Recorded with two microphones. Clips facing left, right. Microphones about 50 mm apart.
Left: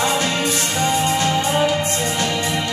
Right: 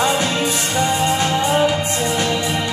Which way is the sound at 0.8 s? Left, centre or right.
Right.